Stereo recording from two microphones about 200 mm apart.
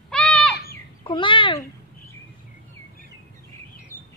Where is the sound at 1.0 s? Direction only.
25° left (ahead or behind).